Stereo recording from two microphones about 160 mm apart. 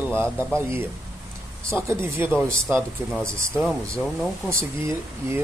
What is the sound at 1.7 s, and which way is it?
Speech, 15° right (ahead or behind).